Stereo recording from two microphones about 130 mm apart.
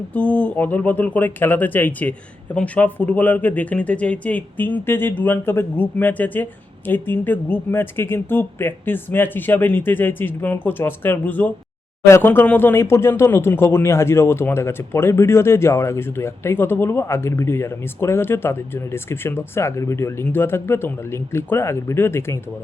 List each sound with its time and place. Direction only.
0.1 s speech: 10° left (ahead or behind)